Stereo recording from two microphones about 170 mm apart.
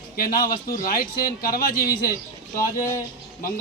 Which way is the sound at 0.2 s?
60° left (ahead or behind).